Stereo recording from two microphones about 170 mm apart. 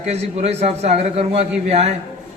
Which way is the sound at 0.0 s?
40° right (ahead or behind).